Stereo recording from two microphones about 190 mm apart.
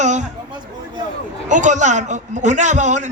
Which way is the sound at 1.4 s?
40° right (ahead or behind).